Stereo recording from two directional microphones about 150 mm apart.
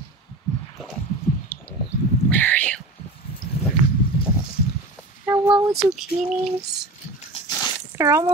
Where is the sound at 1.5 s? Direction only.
10° left (ahead or behind).